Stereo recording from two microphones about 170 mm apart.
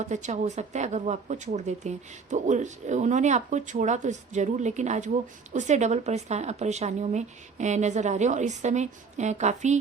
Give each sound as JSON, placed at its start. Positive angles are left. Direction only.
{"t": 0.0, "sound": "a woman's voice", "side_deg": -45}